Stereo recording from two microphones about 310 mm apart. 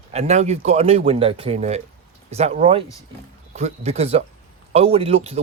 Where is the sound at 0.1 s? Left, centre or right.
Right.